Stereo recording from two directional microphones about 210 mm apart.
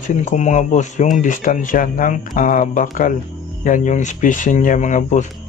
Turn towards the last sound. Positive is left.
turn(degrees=35)  # may be behind; listen again after turning